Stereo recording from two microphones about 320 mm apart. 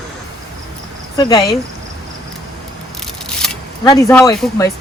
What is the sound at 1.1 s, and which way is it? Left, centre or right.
Speech, centre.